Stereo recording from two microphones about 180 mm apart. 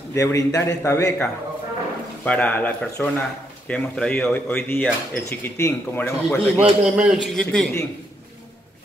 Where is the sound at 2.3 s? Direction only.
10° left (ahead or behind).